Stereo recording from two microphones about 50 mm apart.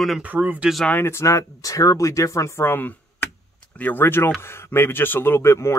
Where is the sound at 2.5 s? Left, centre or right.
Left.